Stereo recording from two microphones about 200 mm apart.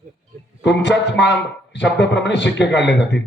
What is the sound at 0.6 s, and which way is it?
A man's voice, 60° left (ahead or behind).